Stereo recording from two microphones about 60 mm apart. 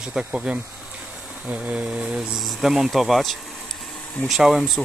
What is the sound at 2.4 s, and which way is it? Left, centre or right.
Speech, centre.